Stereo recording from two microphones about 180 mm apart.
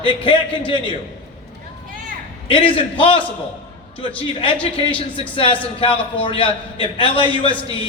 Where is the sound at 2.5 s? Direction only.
30° left (ahead or behind).